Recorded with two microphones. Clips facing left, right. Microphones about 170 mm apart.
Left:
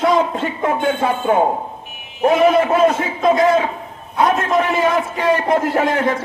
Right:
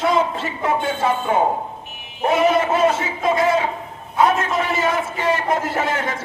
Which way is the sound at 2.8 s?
40° left (ahead or behind).